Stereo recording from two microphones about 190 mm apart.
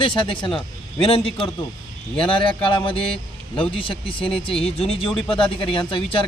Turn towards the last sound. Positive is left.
turn(degrees=25)  # may be behind; listen again after turning